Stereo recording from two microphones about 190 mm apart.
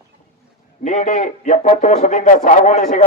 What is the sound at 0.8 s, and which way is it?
A man's voice, 40° left (ahead or behind).